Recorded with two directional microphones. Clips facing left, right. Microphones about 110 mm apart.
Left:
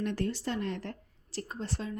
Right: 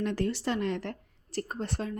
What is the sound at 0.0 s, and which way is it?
Speech, 85° right.